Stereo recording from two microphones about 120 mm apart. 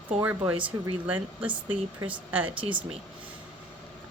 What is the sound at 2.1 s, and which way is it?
Speech, 15° right (ahead or behind).